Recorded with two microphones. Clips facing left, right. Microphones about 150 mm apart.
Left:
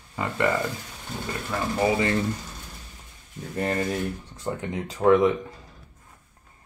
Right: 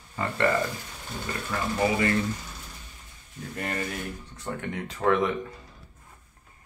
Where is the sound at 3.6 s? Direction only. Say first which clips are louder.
Left 7 dB; 30° left (ahead or behind).